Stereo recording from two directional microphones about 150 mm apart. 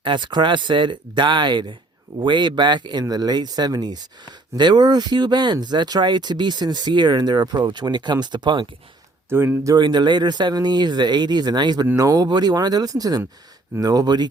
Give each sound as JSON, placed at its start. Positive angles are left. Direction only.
{"t": 0.0, "sound": "speech", "side_deg": -30}
{"t": 9.3, "sound": "speech", "side_deg": -15}
{"t": 9.7, "sound": "speech", "side_deg": -30}